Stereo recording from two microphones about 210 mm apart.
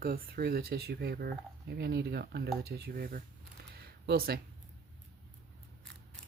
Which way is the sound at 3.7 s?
50° right (ahead or behind).